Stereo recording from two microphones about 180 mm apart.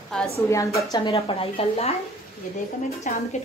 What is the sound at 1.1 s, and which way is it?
Speech, 35° left (ahead or behind).